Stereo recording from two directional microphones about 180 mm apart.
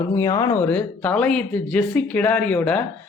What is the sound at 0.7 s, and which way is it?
Speech, 10° left (ahead or behind).